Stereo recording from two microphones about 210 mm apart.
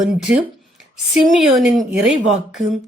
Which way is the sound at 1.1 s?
Centre (ahead or behind).